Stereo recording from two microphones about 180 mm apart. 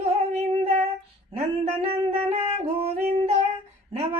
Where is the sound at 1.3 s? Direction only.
35° right (ahead or behind).